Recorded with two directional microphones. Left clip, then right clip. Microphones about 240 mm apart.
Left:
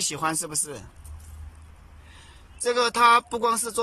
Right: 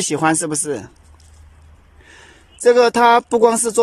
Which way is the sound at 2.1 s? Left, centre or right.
Right.